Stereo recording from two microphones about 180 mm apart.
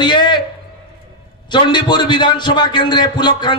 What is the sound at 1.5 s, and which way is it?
A man's voice, 25° left (ahead or behind).